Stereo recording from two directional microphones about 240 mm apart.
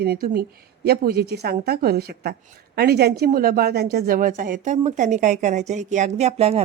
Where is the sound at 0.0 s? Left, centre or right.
Right.